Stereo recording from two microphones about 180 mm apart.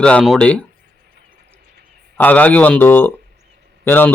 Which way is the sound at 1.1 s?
60° right (ahead or behind).